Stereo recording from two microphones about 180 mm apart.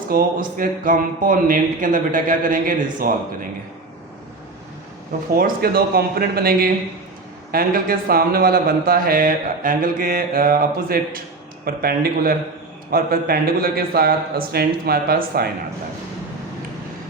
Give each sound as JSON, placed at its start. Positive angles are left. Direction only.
{"t": 0.1, "sound": "speech", "side_deg": -55}
{"t": 5.3, "sound": "a man's voice", "side_deg": -55}